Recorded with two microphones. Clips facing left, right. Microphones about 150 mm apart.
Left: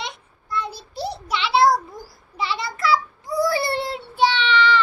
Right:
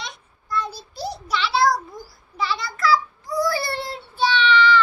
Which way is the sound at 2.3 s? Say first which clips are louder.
Even; 25° left (ahead or behind).